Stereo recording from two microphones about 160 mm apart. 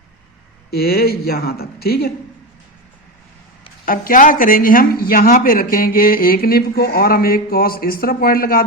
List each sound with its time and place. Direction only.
0.7 s speech: 75° left (ahead or behind)
3.8 s speech: 60° left (ahead or behind)